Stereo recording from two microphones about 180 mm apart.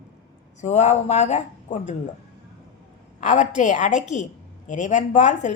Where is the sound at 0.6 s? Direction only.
40° left (ahead or behind).